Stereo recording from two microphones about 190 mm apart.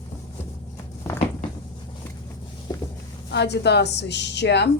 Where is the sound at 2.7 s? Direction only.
20° left (ahead or behind).